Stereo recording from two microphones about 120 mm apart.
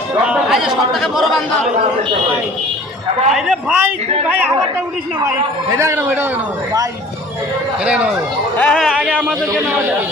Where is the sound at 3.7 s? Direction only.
15° right (ahead or behind).